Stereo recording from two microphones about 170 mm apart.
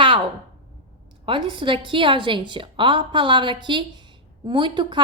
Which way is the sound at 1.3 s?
30° right (ahead or behind).